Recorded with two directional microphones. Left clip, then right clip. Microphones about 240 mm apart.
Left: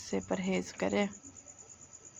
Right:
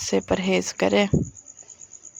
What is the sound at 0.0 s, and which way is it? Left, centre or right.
Speech, right.